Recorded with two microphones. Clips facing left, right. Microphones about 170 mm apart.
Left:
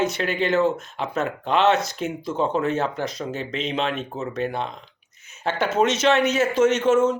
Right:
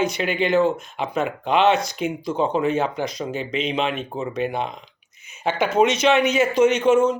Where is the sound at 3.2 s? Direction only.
10° right (ahead or behind).